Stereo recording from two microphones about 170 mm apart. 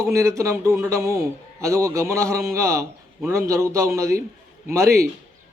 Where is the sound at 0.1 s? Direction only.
20° right (ahead or behind).